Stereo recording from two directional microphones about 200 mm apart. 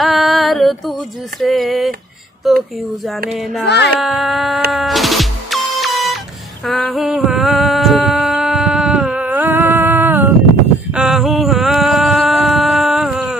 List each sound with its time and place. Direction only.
0.0 s music: centre (ahead or behind)
1.4 s speech: centre (ahead or behind)
3.6 s a sound: 60° left (ahead or behind)
4.0 s speech: centre (ahead or behind)
4.7 s music: centre (ahead or behind)
6.6 s a sound: centre (ahead or behind)